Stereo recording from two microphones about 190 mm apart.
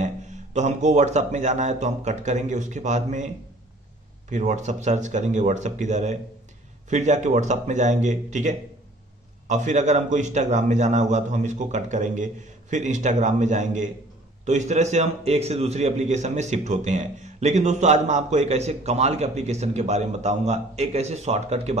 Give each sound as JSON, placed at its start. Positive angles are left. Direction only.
{"t": 0.0, "sound": "a man's voice", "side_deg": -40}
{"t": 4.3, "sound": "a man's voice", "side_deg": -40}